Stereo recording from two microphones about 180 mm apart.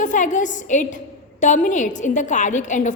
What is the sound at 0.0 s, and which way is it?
A woman's voice, 45° left (ahead or behind).